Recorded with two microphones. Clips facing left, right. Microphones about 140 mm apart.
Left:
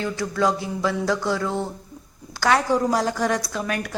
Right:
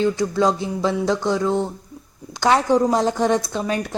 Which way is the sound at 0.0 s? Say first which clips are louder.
Right 4 dB; 20° right (ahead or behind).